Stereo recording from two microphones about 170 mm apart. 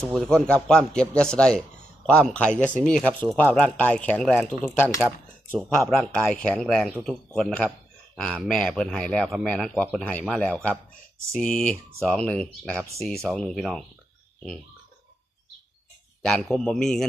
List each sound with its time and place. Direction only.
0.1 s speech: centre (ahead or behind)
16.2 s speech: centre (ahead or behind)